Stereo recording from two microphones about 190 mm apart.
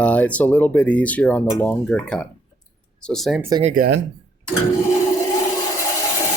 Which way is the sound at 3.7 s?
60° right (ahead or behind).